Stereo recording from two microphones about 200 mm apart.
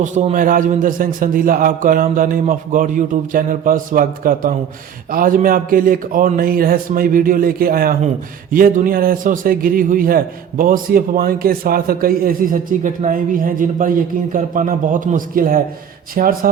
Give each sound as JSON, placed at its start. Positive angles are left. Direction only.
{"t": 0.0, "sound": "a man's voice", "side_deg": -35}